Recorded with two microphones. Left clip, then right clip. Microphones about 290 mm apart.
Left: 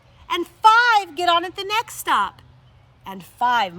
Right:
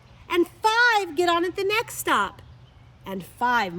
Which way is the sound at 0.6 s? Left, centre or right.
Centre.